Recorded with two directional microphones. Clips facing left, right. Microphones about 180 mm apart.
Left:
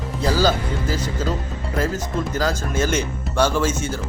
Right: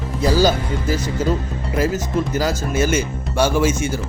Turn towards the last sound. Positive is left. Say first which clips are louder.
# right 3 dB
turn(degrees=-10)  # may be behind; listen again after turning